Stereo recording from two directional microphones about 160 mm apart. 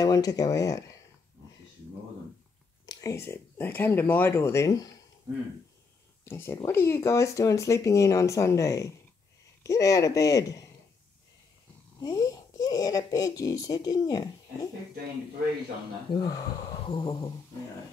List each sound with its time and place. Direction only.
0.0 s speech: 25° left (ahead or behind)
2.9 s speech: 20° left (ahead or behind)
6.2 s speech: 15° left (ahead or behind)
12.0 s speech: 20° left (ahead or behind)
16.2 s speech: 25° left (ahead or behind)